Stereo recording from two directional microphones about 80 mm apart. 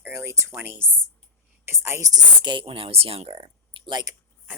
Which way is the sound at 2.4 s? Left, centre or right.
Right.